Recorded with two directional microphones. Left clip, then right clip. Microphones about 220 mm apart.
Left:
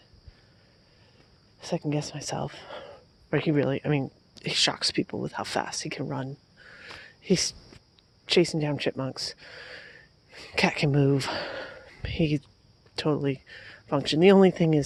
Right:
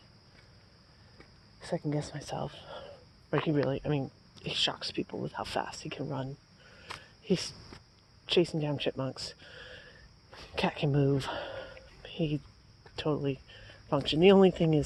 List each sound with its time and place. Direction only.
1.6 s speech: 50° left (ahead or behind)
7.0 s a sound: 45° left (ahead or behind)
8.3 s speech: 45° left (ahead or behind)